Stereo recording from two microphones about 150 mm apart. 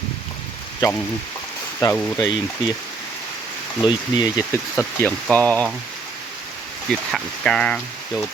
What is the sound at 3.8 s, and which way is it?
Speech, 30° left (ahead or behind).